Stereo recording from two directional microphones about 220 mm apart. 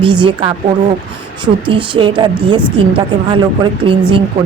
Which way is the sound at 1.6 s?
20° right (ahead or behind).